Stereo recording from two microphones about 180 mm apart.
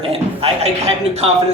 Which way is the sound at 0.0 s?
30° right (ahead or behind).